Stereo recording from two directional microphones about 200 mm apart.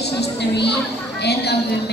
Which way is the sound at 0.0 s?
55° left (ahead or behind).